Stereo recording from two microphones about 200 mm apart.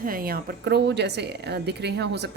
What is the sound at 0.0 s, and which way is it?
A woman's voice, 45° right (ahead or behind).